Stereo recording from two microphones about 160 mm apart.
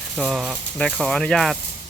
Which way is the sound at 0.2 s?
Centre (ahead or behind).